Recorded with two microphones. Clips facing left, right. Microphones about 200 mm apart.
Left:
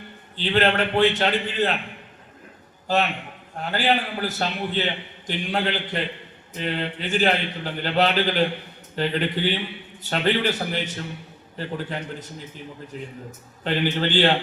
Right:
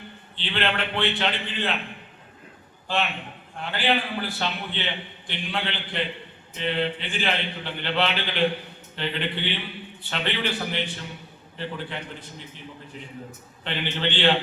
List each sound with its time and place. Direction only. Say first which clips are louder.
0.3 s a man's voice: left 6 dB; 40° left (ahead or behind)
2.8 s a man's voice: left 4 dB; 40° left (ahead or behind)
13.7 s a man's voice: left 5 dB; 40° left (ahead or behind)